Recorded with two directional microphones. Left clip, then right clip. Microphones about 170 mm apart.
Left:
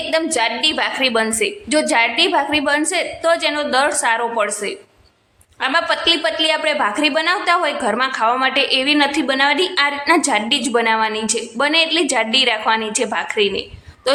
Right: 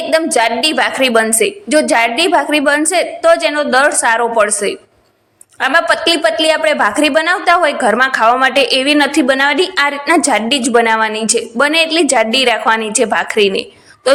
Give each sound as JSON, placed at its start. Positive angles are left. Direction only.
{"t": 0.1, "sound": "a woman's voice", "side_deg": -25}